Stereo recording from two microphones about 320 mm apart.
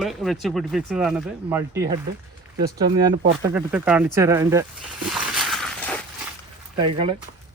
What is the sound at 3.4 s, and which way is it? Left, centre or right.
Speech, centre.